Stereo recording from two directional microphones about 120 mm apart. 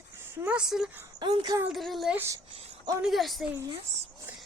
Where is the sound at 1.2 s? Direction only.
40° right (ahead or behind).